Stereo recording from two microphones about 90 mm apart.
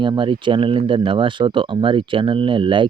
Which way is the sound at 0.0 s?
60° right (ahead or behind).